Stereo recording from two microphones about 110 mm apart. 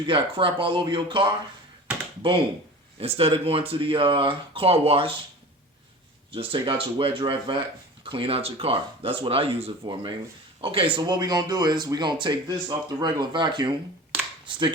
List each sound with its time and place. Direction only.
0.1 s speech: 50° right (ahead or behind)
3.0 s speech: 65° right (ahead or behind)
6.3 s speech: 55° right (ahead or behind)
9.8 s speech: 45° right (ahead or behind)
11.0 s speech: 40° right (ahead or behind)